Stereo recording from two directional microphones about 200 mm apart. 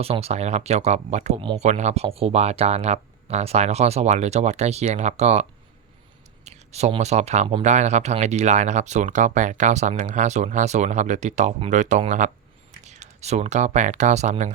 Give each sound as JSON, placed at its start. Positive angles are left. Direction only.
{"t": 0.0, "sound": "speech", "side_deg": -30}